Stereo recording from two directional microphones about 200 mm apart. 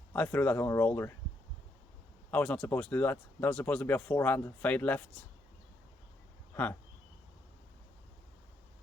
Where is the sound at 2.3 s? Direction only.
5° left (ahead or behind).